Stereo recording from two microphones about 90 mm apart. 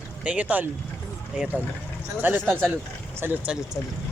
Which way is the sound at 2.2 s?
20° right (ahead or behind).